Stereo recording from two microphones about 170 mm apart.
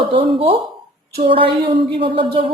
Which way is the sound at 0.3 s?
30° right (ahead or behind).